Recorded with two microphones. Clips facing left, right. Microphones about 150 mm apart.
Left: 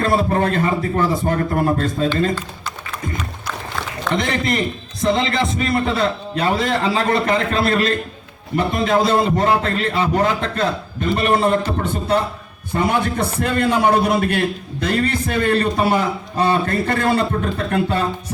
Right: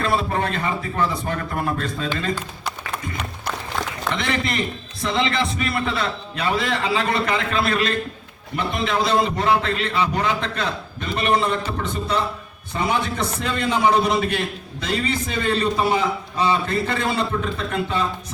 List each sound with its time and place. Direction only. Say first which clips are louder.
0.0 s a man's voice: left 5 dB; 45° left (ahead or behind)
4.1 s a man's voice: left 5 dB; 40° left (ahead or behind); by 17.2 s 55° left (ahead or behind)